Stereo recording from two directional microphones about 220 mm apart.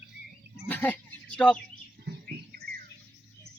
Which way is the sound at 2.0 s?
45° right (ahead or behind).